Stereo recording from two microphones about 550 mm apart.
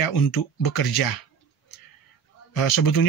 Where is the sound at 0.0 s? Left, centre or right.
Left.